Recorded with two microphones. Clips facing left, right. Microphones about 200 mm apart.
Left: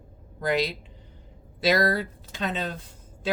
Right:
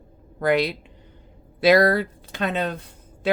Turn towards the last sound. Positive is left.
turn(degrees=-60)  # may be behind; listen again after turning